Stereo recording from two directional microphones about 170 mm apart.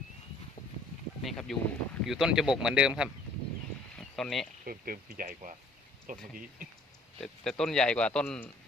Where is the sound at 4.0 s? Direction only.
5° left (ahead or behind).